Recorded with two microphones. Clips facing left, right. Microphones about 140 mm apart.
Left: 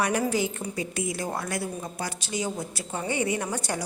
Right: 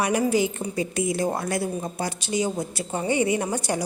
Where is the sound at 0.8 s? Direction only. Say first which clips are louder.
Right 7 dB; 25° right (ahead or behind).